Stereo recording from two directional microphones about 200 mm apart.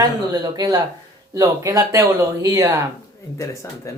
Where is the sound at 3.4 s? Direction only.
15° left (ahead or behind).